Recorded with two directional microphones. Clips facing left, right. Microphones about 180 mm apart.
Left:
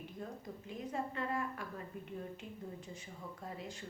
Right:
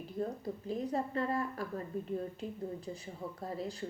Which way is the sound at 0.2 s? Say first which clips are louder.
Right 11 dB; 35° right (ahead or behind).